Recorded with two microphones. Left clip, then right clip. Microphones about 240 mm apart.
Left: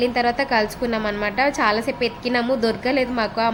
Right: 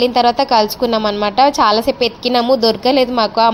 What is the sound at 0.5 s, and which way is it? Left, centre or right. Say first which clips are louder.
A woman's voice: right 8 dB; centre.